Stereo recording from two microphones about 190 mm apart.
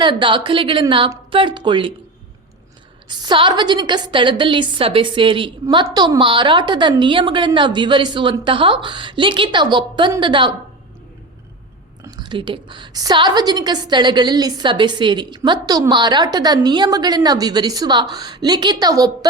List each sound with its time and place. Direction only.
0.0 s a woman's voice: 25° right (ahead or behind)
3.1 s a woman's voice: 25° right (ahead or behind)
12.0 s a woman's voice: 20° right (ahead or behind)